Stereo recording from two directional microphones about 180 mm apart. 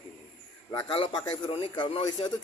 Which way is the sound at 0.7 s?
25° left (ahead or behind).